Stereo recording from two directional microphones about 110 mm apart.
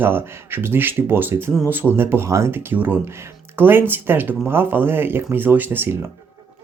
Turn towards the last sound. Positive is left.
turn(degrees=-20)  # may be behind; listen again after turning